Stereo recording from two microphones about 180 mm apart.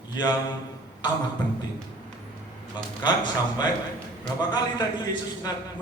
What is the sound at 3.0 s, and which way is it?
Mantra, 25° left (ahead or behind).